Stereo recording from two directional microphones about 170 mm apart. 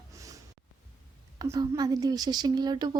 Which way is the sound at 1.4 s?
20° right (ahead or behind).